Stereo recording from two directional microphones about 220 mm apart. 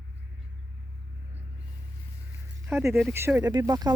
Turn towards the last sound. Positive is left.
turn(degrees=-15)  # may be behind; listen again after turning